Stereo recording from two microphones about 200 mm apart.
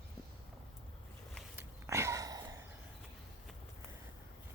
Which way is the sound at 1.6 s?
15° right (ahead or behind).